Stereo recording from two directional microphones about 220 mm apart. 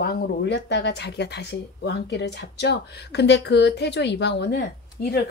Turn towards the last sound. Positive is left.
turn(degrees=50)  # may be behind; listen again after turning